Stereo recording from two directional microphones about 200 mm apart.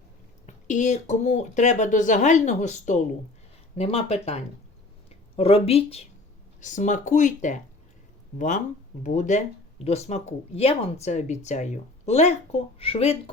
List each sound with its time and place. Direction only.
0.4 s speech: 35° left (ahead or behind)
9.0 s speech: 40° left (ahead or behind)